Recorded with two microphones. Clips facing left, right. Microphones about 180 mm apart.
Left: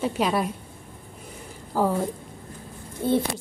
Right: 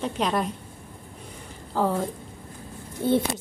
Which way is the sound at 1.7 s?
10° left (ahead or behind).